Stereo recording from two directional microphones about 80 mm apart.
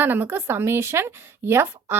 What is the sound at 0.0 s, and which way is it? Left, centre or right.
Speech, right.